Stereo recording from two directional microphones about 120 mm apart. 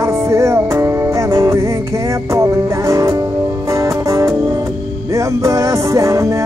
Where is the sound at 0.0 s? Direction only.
25° right (ahead or behind).